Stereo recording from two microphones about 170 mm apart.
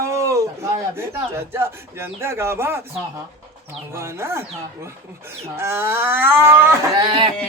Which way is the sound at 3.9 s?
15° right (ahead or behind).